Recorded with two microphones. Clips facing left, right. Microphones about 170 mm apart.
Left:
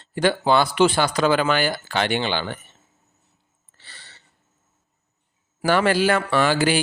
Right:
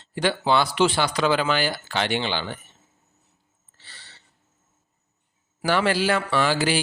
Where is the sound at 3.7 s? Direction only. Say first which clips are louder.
Left 2 dB; 55° left (ahead or behind).